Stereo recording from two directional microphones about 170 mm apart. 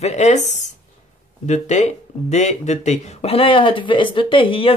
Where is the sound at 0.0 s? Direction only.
40° left (ahead or behind).